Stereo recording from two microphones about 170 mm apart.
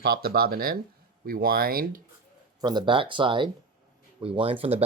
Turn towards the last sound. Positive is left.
turn(degrees=-30)  # may be behind; listen again after turning